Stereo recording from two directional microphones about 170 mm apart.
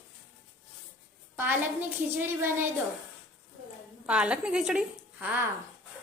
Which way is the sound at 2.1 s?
15° right (ahead or behind).